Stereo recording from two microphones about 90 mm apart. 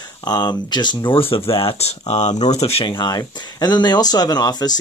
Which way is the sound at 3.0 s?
45° left (ahead or behind).